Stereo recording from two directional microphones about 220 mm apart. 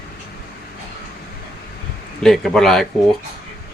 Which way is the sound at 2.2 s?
Centre (ahead or behind).